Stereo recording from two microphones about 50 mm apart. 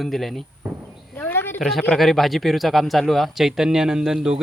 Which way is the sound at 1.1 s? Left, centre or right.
Left.